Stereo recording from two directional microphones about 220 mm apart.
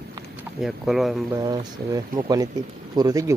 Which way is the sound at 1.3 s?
20° right (ahead or behind).